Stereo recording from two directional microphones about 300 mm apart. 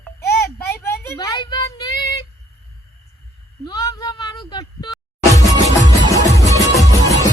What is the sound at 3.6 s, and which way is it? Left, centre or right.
Speech, centre.